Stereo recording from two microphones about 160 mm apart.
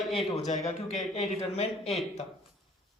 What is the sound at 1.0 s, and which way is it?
Speech, 45° left (ahead or behind).